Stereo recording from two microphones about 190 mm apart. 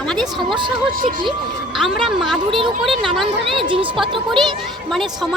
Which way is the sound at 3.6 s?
25° right (ahead or behind).